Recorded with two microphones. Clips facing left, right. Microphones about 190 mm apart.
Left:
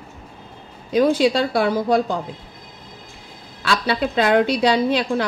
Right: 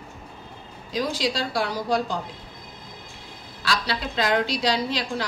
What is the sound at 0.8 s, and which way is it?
A woman's voice, 60° left (ahead or behind).